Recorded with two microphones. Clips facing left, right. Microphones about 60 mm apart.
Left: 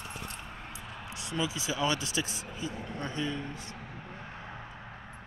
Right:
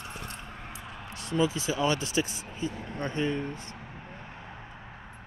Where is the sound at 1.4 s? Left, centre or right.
Right.